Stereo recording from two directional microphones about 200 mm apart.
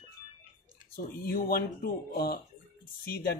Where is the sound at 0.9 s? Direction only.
45° left (ahead or behind).